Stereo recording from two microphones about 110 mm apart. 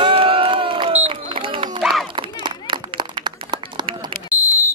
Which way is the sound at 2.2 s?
45° right (ahead or behind).